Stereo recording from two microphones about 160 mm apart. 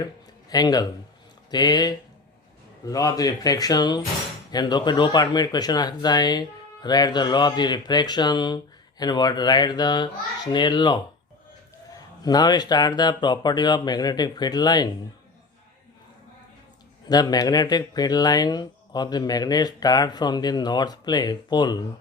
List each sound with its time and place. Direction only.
0.5 s speech: 25° left (ahead or behind)
12.2 s speech: 25° left (ahead or behind)
17.1 s speech: 25° left (ahead or behind)